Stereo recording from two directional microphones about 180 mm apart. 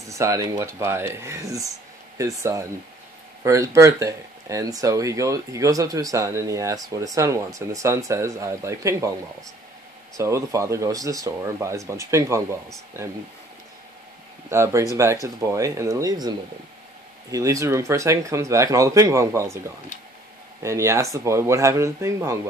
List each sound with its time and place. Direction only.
0.1 s speech: 15° right (ahead or behind)
10.1 s speech: 15° right (ahead or behind)
14.5 s speech: 15° right (ahead or behind)
20.6 s speech: 15° right (ahead or behind)